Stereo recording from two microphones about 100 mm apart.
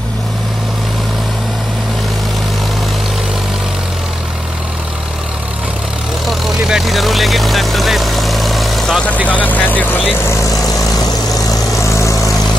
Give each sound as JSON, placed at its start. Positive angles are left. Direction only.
{"t": 6.2, "sound": "vehicle", "side_deg": -5}
{"t": 9.3, "sound": "speech", "side_deg": 15}
{"t": 10.6, "sound": "vehicle", "side_deg": 35}